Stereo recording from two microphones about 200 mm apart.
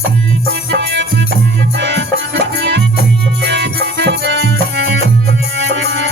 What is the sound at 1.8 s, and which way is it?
Music, 60° right (ahead or behind).